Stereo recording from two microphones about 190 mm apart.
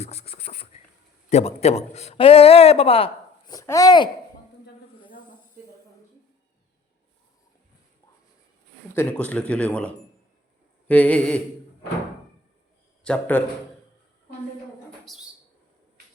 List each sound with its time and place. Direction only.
0.0 s beatboxing: 35° left (ahead or behind)
1.3 s a man's voice: 35° left (ahead or behind)
9.0 s speech: 10° left (ahead or behind)
13.1 s speech: 10° left (ahead or behind)
15.0 s a sound: centre (ahead or behind)